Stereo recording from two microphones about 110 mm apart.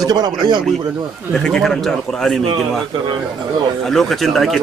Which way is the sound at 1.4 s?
5° left (ahead or behind).